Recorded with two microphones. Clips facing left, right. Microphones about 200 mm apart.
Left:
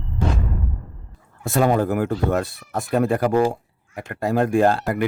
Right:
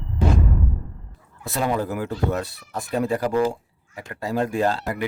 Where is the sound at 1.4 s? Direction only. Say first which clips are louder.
Left 5 dB; 50° left (ahead or behind).